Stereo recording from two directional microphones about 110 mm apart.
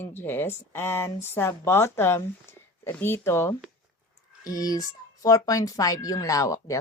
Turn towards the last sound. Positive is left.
turn(degrees=30)  # may be behind; listen again after turning